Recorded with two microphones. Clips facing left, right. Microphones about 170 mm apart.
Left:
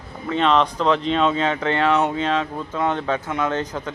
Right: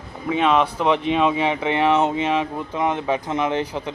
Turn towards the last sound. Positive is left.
turn(degrees=-10)  # may be behind; listen again after turning